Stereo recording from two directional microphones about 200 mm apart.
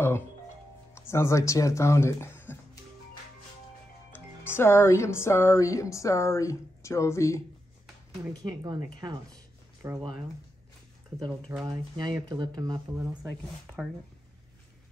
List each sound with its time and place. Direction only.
0.9 s speech: 15° left (ahead or behind)
4.1 s speech: 10° left (ahead or behind)
8.3 s speech: 20° right (ahead or behind)
11.1 s speech: 20° right (ahead or behind)